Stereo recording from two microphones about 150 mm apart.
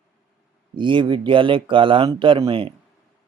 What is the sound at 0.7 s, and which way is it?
Speech, 35° right (ahead or behind).